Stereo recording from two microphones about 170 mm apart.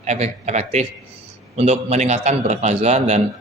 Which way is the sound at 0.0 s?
40° right (ahead or behind).